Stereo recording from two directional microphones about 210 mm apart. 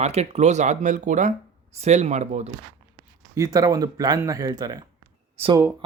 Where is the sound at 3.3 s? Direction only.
15° right (ahead or behind).